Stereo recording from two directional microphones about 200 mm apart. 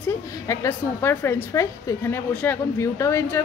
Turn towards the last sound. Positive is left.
turn(degrees=15)  # may be behind; listen again after turning